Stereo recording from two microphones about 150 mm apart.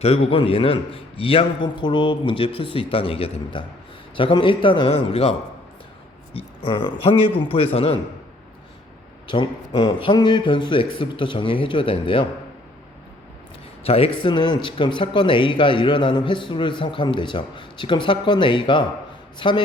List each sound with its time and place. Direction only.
0.0 s speech: 40° left (ahead or behind)
6.6 s speech: 35° left (ahead or behind)
9.2 s speech: 35° left (ahead or behind)
13.8 s speech: 40° left (ahead or behind)